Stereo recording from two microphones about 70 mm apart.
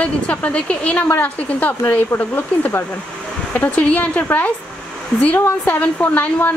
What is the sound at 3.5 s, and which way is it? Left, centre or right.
A woman's voice, centre.